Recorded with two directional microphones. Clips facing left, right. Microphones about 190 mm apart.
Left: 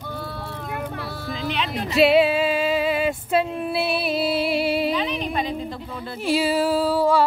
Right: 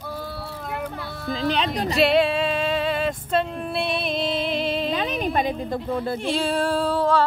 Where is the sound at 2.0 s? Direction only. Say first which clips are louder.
Left 3 dB; 5° left (ahead or behind).